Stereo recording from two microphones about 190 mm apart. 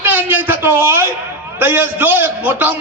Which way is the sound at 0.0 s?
10° right (ahead or behind).